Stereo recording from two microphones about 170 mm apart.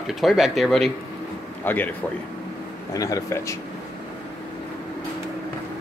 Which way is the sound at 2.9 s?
20° left (ahead or behind).